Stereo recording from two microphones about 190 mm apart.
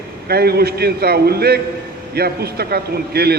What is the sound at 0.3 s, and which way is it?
A man's voice, 55° right (ahead or behind).